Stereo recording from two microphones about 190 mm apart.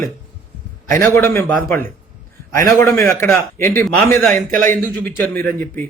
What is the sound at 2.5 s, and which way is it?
A man's voice, 15° left (ahead or behind).